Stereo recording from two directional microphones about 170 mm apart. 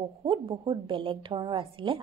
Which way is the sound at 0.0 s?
30° right (ahead or behind).